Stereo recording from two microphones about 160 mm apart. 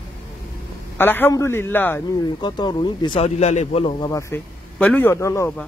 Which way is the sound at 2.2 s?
30° left (ahead or behind).